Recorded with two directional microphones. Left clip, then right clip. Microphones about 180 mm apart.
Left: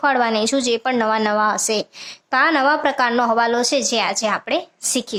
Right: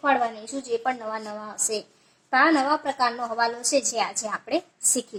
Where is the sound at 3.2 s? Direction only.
30° left (ahead or behind).